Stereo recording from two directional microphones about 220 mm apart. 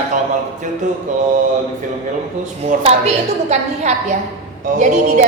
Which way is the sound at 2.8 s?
30° right (ahead or behind).